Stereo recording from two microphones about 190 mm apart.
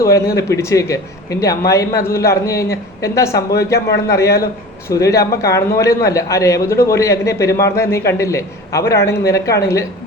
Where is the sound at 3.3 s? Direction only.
55° left (ahead or behind).